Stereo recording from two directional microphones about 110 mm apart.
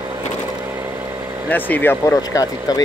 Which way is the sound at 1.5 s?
15° left (ahead or behind).